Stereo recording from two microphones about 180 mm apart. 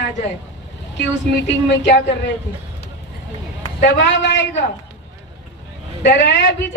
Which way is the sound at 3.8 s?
75° left (ahead or behind).